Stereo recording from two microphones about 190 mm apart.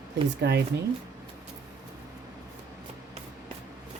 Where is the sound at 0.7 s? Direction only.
65° right (ahead or behind).